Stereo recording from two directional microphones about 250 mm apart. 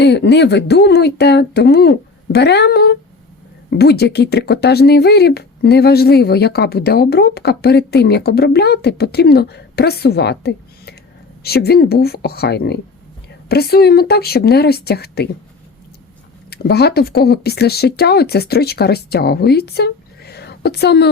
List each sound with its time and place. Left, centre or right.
0.0 s speech: left
16.5 s speech: left